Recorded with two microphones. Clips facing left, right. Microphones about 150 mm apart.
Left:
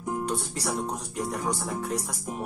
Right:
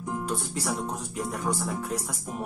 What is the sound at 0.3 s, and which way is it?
Speech, centre (ahead or behind).